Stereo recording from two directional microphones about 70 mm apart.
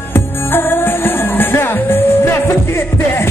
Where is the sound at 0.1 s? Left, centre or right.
Left.